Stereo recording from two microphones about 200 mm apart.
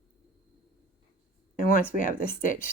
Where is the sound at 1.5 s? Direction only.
40° left (ahead or behind).